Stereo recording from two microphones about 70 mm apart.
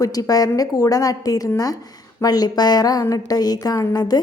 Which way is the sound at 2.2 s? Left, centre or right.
Left.